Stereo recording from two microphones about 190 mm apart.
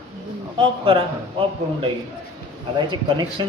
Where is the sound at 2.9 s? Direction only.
25° right (ahead or behind).